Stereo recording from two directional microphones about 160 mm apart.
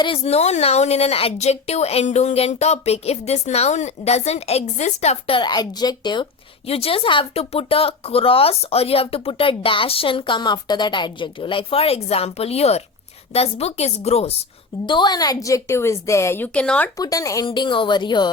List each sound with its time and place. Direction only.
0.0 s a woman's voice: 35° left (ahead or behind)
6.7 s a woman's voice: 35° left (ahead or behind)
14.8 s a woman's voice: 30° left (ahead or behind); by 16.9 s 10° left (ahead or behind)
17.0 s a woman's voice: 20° left (ahead or behind)